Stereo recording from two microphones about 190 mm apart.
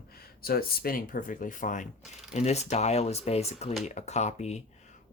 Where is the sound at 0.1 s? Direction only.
55° left (ahead or behind).